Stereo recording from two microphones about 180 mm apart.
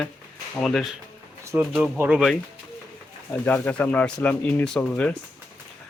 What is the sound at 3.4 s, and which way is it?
Speech, 10° left (ahead or behind).